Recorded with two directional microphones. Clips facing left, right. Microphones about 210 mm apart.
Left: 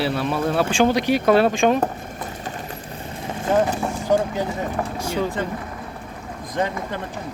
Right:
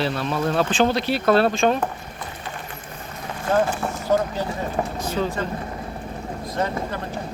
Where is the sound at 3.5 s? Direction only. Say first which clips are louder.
Left 1 dB; 20° left (ahead or behind).